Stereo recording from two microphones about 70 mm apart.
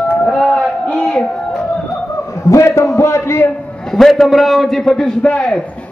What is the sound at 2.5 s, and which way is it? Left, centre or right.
A man's voice, left.